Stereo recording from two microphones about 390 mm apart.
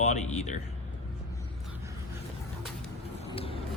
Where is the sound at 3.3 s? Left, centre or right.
Centre.